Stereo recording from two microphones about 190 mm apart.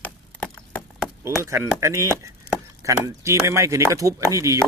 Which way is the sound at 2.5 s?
55° left (ahead or behind).